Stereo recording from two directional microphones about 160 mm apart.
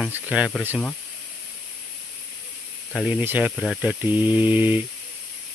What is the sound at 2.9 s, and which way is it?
Speech, 5° right (ahead or behind).